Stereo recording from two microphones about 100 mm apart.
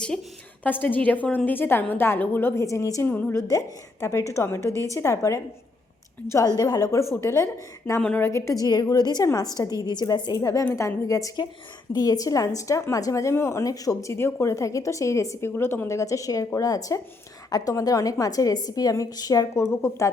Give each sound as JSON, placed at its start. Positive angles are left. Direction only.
{"t": 0.6, "sound": "a woman's voice", "side_deg": 15}
{"t": 3.1, "sound": "a woman's voice", "side_deg": 15}
{"t": 4.0, "sound": "a woman's voice", "side_deg": 30}
{"t": 6.6, "sound": "a woman's voice", "side_deg": 40}
{"t": 8.0, "sound": "a woman's voice", "side_deg": 20}
{"t": 8.3, "sound": "speech", "side_deg": 30}